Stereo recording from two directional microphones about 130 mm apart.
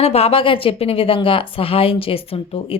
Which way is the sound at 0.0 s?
50° left (ahead or behind).